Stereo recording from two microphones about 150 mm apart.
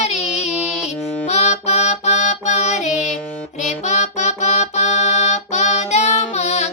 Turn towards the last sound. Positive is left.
turn(degrees=50)  # may be behind; listen again after turning